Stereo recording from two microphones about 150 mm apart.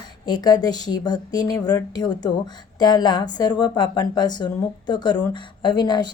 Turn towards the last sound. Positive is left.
turn(degrees=30)  # may be behind; listen again after turning